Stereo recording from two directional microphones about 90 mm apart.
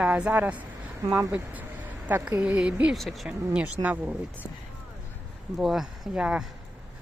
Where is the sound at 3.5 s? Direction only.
15° right (ahead or behind).